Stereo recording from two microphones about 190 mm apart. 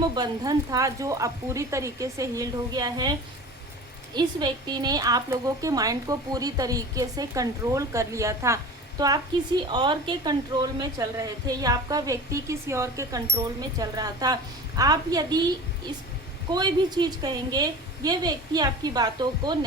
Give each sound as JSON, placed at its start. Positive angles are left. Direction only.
{"t": 0.2, "sound": "speech", "side_deg": -20}
{"t": 16.5, "sound": "speech", "side_deg": -20}